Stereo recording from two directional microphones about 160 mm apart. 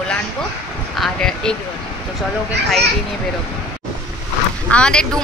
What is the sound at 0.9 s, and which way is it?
Speech, centre (ahead or behind).